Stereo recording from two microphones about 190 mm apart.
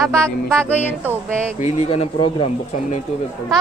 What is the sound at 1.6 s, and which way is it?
Speech, 35° left (ahead or behind).